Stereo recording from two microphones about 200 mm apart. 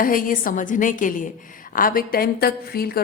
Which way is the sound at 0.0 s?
45° left (ahead or behind).